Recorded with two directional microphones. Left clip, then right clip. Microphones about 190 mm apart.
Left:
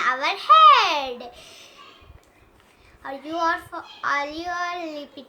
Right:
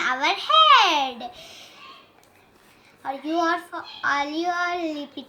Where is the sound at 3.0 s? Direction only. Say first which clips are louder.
Right 1 dB; 10° left (ahead or behind).